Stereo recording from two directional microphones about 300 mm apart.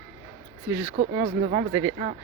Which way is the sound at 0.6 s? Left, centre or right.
Centre.